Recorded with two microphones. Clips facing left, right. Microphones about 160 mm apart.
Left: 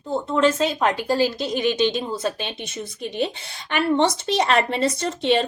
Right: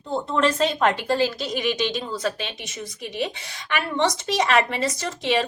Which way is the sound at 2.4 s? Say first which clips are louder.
Left 3 dB; 30° left (ahead or behind).